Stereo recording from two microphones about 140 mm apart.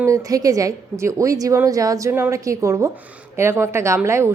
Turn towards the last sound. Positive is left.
turn(degrees=-20)  # may be behind; listen again after turning